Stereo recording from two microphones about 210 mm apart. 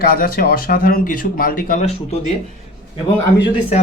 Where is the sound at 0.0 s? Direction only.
45° left (ahead or behind).